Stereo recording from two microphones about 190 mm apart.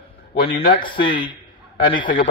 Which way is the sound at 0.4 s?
55° left (ahead or behind).